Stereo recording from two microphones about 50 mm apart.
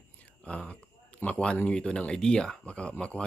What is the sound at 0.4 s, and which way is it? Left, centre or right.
Speech, left.